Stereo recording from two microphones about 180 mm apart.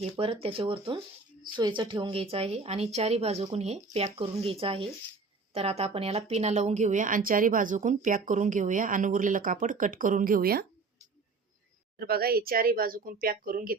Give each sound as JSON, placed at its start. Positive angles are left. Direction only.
{"t": 0.0, "sound": "a woman's voice", "side_deg": -30}
{"t": 11.9, "sound": "speech", "side_deg": -60}